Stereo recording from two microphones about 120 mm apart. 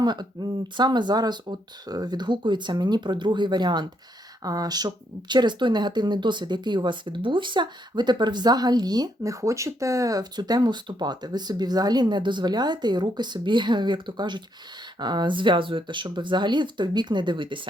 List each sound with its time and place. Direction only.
0.0 s speech: 35° right (ahead or behind)